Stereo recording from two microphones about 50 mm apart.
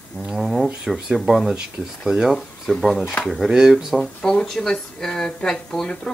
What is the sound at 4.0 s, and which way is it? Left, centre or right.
Speech, centre.